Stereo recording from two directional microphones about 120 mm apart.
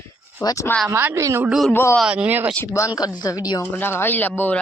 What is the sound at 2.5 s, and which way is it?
Speech, 15° left (ahead or behind).